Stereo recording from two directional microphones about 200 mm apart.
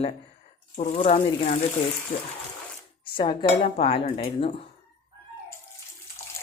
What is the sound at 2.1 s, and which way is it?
Speech, 30° left (ahead or behind).